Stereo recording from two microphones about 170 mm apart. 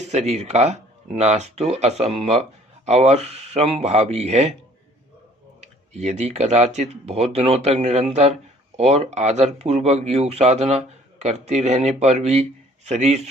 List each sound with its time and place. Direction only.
0.1 s speech: 40° right (ahead or behind)
5.5 s speech: 40° right (ahead or behind)